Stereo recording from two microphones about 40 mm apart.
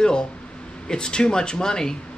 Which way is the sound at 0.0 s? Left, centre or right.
Left.